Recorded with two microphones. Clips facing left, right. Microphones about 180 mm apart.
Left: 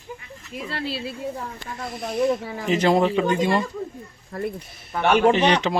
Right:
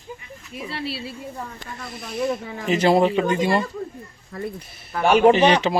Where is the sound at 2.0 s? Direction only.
30° left (ahead or behind).